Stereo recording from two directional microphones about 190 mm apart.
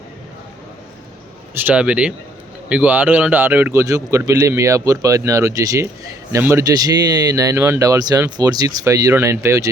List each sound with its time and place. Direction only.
1.5 s speech: 10° right (ahead or behind)